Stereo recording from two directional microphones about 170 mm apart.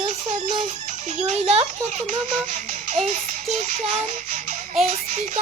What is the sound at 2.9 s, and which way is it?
Child singing, 40° right (ahead or behind).